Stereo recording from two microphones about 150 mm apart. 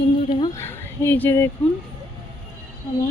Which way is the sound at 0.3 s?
35° left (ahead or behind).